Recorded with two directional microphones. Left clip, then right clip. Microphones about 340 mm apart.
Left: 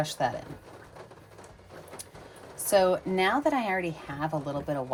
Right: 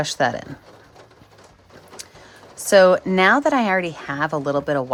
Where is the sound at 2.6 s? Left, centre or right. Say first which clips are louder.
Right 10 dB; right.